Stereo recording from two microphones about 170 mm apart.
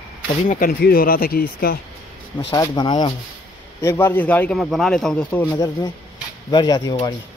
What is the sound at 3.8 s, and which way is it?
A man's voice, 15° left (ahead or behind).